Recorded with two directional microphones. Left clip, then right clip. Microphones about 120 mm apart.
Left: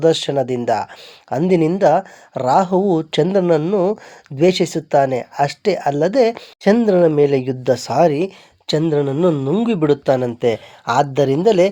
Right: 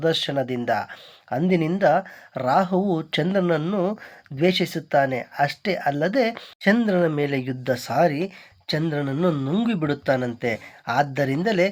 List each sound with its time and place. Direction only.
0.0 s speech: 50° left (ahead or behind)
6.8 s speech: 35° left (ahead or behind); by 11.7 s 50° left (ahead or behind)